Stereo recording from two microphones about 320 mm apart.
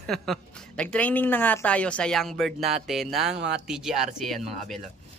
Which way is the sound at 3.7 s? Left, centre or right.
Centre.